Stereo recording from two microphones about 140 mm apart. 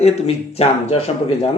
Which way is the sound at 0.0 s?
45° left (ahead or behind).